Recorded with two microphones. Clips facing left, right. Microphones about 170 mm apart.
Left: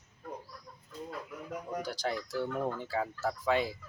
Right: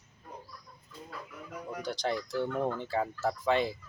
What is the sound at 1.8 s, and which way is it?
Speech, 5° left (ahead or behind).